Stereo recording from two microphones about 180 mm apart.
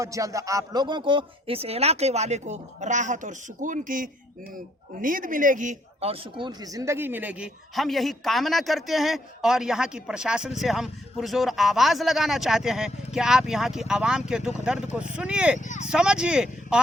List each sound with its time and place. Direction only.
0.0 s a man's voice: 15° right (ahead or behind)
15.5 s speech: 45° left (ahead or behind)
15.9 s a man's voice: 5° right (ahead or behind)